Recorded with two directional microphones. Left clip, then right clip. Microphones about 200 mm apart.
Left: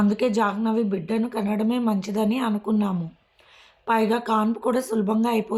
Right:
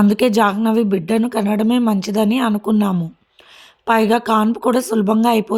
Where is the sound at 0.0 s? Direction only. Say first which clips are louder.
Right 8 dB; 50° right (ahead or behind).